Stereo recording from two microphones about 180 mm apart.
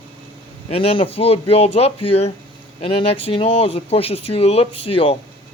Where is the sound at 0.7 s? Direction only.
30° left (ahead or behind).